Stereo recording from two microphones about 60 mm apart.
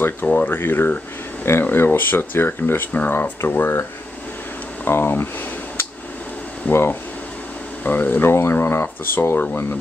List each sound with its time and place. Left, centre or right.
0.0 s speech: left
4.8 s speech: left
6.7 s speech: left